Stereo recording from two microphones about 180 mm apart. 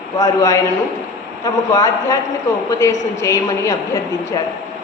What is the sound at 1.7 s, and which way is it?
A woman's voice, 15° left (ahead or behind).